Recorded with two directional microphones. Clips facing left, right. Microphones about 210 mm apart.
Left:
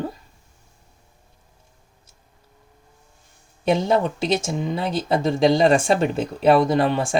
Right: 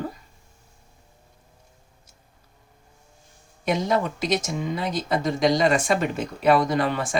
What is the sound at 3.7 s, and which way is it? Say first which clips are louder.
Speech: left 4 dB; 30° left (ahead or behind).